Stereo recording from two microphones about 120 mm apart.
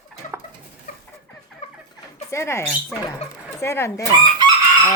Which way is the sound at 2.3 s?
20° left (ahead or behind).